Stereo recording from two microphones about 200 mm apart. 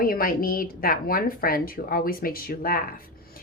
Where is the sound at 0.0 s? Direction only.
45° left (ahead or behind).